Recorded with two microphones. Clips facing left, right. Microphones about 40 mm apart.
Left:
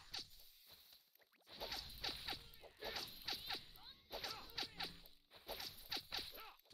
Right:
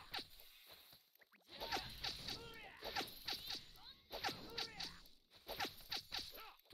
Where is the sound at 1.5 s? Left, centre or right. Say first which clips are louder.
Right 1 dB; right.